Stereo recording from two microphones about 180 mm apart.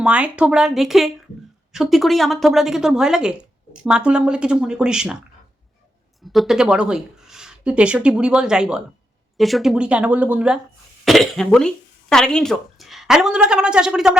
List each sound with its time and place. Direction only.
0.0 s speech: 5° right (ahead or behind)
6.2 s speech: centre (ahead or behind)